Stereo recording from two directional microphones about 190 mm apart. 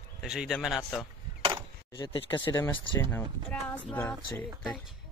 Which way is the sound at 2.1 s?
30° left (ahead or behind).